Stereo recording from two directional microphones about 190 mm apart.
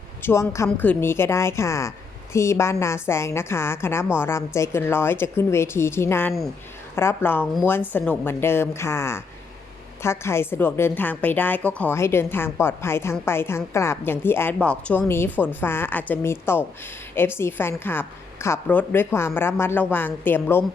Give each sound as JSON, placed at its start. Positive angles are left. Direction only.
{"t": 0.2, "sound": "a woman's voice", "side_deg": 15}